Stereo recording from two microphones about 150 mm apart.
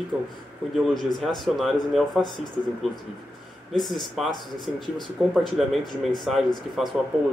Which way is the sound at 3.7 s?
Centre (ahead or behind).